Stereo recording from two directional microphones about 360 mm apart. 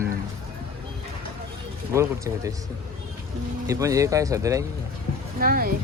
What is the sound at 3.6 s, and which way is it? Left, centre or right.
Speech, centre.